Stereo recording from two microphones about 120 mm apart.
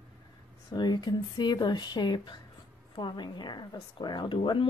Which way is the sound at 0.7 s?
35° left (ahead or behind).